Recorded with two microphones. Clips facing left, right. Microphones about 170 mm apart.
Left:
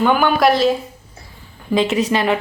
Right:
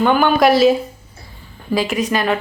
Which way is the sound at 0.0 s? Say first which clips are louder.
Right 1 dB; 5° left (ahead or behind).